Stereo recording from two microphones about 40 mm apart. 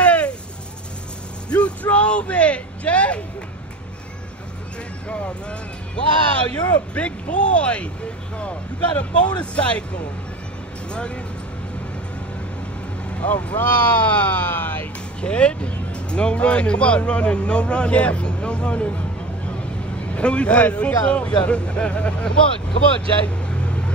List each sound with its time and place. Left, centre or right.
0.0 s a sound: left
1.5 s a sound: left
5.0 s speech: left
10.9 s speech: left
13.1 s speech: left
15.1 s speech: left
20.2 s speech: left
23.2 s vehicle: left